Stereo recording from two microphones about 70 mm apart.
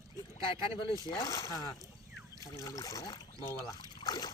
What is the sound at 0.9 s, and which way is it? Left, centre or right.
Speech, left.